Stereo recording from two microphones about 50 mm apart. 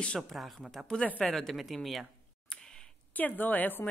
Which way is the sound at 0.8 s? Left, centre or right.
Centre.